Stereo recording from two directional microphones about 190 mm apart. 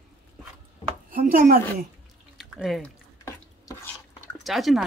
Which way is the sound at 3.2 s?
15° left (ahead or behind).